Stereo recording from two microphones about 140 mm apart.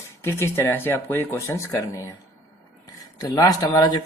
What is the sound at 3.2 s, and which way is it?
Speech, 25° left (ahead or behind).